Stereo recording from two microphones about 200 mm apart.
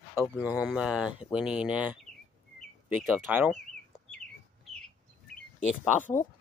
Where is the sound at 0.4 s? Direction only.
5° right (ahead or behind).